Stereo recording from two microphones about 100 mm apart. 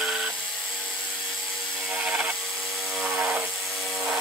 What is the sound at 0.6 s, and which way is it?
Helicopter, 10° left (ahead or behind).